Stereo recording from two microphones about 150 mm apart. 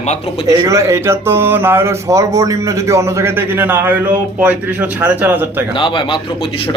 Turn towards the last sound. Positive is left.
turn(degrees=30)  # may be behind; listen again after turning